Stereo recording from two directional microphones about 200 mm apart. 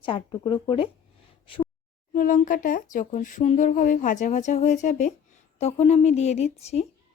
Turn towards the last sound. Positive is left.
turn(degrees=35)  # may be behind; listen again after turning